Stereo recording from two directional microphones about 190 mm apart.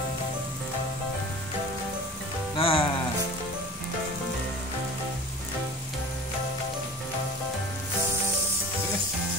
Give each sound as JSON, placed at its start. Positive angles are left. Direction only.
{"t": 2.5, "sound": "music", "side_deg": 30}